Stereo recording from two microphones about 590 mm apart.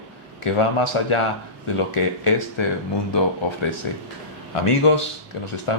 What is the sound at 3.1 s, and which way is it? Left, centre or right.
Speech, left.